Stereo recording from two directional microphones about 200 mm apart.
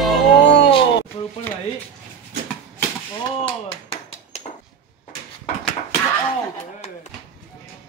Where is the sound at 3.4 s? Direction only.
25° left (ahead or behind).